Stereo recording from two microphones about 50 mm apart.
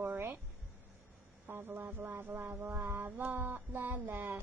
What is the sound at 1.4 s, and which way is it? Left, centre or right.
Speech, right.